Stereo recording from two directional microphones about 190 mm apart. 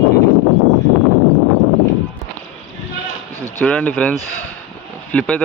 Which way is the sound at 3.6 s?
5° left (ahead or behind).